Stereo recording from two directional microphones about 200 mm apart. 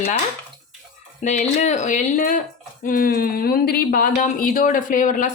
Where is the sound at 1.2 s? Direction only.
35° left (ahead or behind).